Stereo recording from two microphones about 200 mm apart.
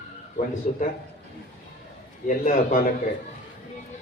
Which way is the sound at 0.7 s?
40° left (ahead or behind).